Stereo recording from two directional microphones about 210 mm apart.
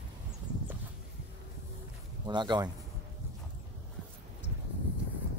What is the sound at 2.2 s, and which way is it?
Speech, 20° right (ahead or behind).